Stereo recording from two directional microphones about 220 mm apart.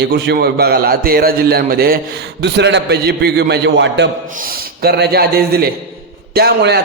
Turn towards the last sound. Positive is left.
turn(degrees=-45)  # may be behind; listen again after turning